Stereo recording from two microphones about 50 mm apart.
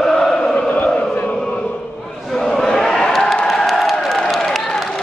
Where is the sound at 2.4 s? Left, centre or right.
Centre.